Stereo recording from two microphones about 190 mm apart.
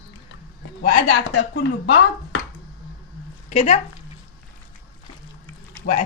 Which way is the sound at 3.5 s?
35° left (ahead or behind).